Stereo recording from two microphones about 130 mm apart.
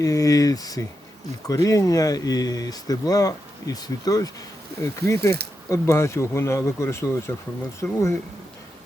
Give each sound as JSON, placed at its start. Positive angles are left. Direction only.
{"t": 0.0, "sound": "speech", "side_deg": 25}